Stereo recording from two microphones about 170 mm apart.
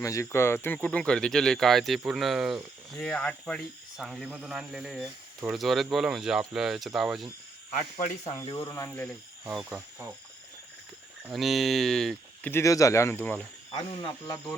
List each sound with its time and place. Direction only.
0.0 s speech: 20° left (ahead or behind); by 7.3 s centre (ahead or behind)
7.8 s speech: 50° left (ahead or behind)
8.7 s speech: 10° left (ahead or behind); by 10.1 s 5° right (ahead or behind)
11.3 s speech: centre (ahead or behind)
12.5 s speech: 15° left (ahead or behind)
13.7 s speech: 25° left (ahead or behind)